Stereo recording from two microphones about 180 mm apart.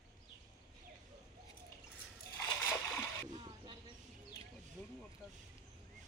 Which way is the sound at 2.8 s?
10° left (ahead or behind).